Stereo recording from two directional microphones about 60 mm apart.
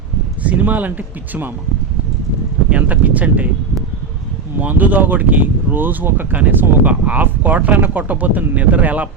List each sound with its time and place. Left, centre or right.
0.4 s speech: right
2.6 s speech: right
4.6 s speech: right